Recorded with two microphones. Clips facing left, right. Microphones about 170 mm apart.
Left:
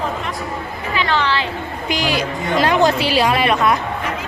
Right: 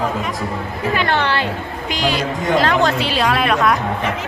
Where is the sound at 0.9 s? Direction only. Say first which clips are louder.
Even; 55° right (ahead or behind).